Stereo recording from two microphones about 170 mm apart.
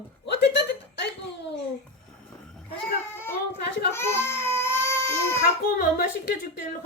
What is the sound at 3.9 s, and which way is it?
Baby cry, 15° left (ahead or behind).